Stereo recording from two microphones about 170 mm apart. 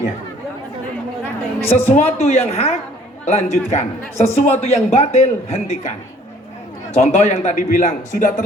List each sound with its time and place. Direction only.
1.6 s a man's voice: 40° left (ahead or behind)
6.9 s a man's voice: 40° left (ahead or behind)